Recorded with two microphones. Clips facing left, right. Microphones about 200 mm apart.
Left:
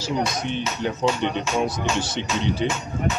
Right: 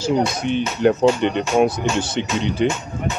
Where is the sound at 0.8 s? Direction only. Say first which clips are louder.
Right 8 dB; 55° right (ahead or behind).